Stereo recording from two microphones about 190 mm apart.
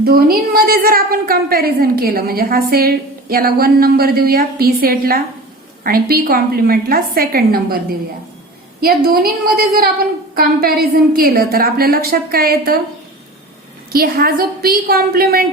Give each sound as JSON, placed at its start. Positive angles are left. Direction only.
{"t": 0.0, "sound": "a woman's voice", "side_deg": -55}
{"t": 13.9, "sound": "a woman's voice", "side_deg": -50}